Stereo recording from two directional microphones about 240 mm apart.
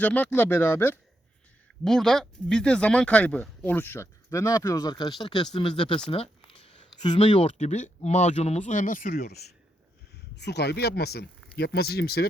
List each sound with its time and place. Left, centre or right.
0.0 s speech: centre; by 12.3 s left